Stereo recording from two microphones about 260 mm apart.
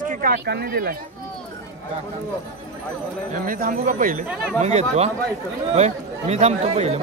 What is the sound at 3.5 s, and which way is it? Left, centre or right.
Speech, right.